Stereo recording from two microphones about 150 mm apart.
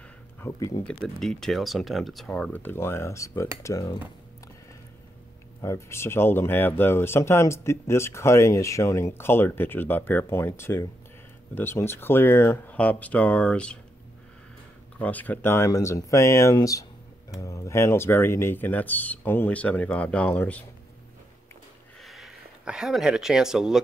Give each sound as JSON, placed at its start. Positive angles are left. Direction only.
{"t": 0.6, "sound": "speech", "side_deg": 20}
{"t": 0.8, "sound": "speech", "side_deg": 5}
{"t": 5.6, "sound": "speech", "side_deg": 20}
{"t": 15.0, "sound": "speech", "side_deg": 10}
{"t": 22.0, "sound": "speech", "side_deg": 0}